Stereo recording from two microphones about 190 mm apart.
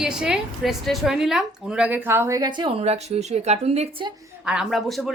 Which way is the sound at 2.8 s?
35° right (ahead or behind).